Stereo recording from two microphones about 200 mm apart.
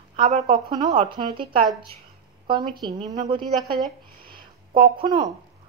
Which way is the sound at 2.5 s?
25° right (ahead or behind).